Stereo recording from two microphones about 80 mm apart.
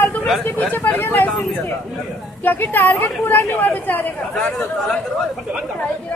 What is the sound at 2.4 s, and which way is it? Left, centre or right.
Speech, left.